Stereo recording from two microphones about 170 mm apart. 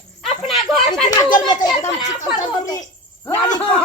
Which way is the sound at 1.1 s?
25° left (ahead or behind).